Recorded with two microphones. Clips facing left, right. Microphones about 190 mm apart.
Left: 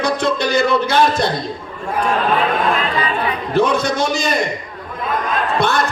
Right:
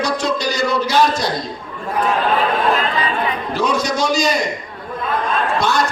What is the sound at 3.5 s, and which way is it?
Speech, 55° left (ahead or behind).